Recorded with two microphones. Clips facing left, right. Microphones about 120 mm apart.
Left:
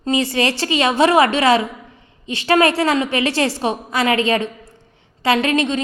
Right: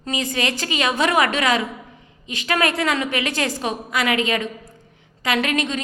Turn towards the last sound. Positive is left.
turn(degrees=30)  # may be behind; listen again after turning